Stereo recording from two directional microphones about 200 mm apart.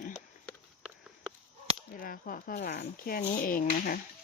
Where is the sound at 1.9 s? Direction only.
45° left (ahead or behind).